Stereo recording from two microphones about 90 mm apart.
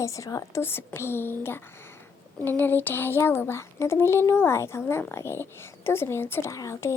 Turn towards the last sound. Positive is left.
turn(degrees=30)  # may be behind; listen again after turning